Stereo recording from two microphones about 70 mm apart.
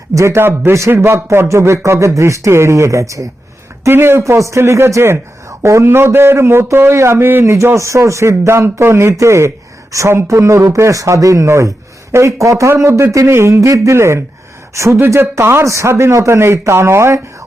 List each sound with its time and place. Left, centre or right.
0.1 s speech: right
3.8 s speech: right
4.2 s speech: right
7.5 s speech: right